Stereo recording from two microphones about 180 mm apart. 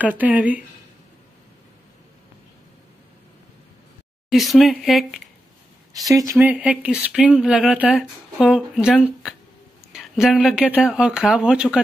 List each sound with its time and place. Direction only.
0.0 s speech: 10° right (ahead or behind)
4.3 s speech: centre (ahead or behind)
5.9 s speech: 20° right (ahead or behind)
6.3 s speech: 5° right (ahead or behind)